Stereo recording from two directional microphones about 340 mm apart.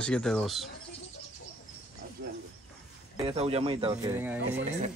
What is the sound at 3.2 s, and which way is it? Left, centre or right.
Speech, centre.